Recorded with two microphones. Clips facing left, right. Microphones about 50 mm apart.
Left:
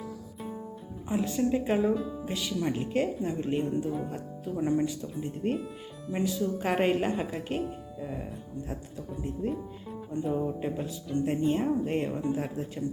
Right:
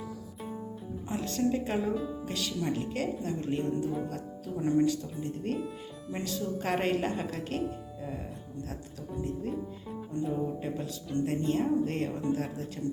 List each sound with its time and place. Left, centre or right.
0.0 s music: centre
1.0 s speech: centre
3.8 s speech: centre
4.1 s speech: centre
6.1 s speech: centre
10.3 s speech: centre